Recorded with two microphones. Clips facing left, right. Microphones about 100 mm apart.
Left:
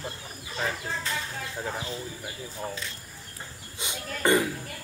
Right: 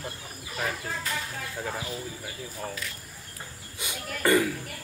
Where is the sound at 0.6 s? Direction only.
30° left (ahead or behind).